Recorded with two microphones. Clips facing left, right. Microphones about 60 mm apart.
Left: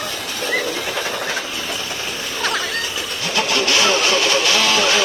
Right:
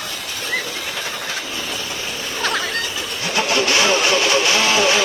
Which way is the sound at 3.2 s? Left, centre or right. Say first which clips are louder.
Right 1 dB; right.